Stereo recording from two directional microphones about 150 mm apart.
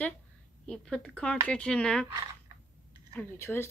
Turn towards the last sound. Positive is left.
turn(degrees=15)  # may be behind; listen again after turning